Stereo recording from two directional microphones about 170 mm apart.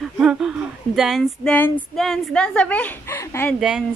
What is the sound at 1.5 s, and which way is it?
Speech, 10° left (ahead or behind).